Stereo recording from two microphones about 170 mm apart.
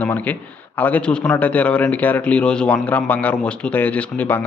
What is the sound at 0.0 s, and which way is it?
Speech, 10° left (ahead or behind).